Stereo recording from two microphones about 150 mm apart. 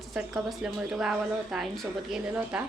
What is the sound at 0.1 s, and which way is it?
Speech, 5° right (ahead or behind).